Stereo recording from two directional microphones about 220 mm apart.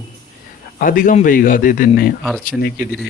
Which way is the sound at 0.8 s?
40° left (ahead or behind).